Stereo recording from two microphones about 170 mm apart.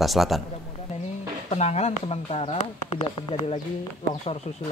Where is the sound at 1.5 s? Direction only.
40° left (ahead or behind).